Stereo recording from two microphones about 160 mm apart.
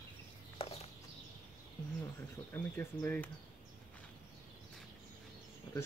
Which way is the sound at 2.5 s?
10° left (ahead or behind).